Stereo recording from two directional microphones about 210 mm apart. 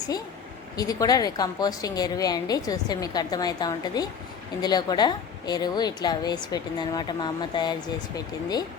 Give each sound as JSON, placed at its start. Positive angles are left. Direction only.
{"t": 0.8, "sound": "a woman's voice", "side_deg": 15}